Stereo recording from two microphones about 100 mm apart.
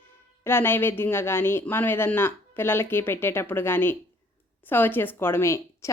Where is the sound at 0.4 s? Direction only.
25° left (ahead or behind).